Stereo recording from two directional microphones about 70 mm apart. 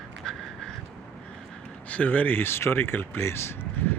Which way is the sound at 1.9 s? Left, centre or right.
Left.